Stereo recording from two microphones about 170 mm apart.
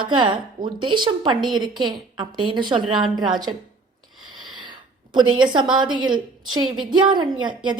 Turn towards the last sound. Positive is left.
turn(degrees=-25)  # may be behind; listen again after turning